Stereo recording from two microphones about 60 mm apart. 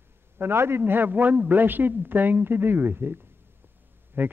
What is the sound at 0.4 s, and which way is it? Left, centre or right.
A man's voice, right.